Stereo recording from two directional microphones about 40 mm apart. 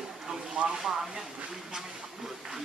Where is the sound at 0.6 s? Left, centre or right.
Centre.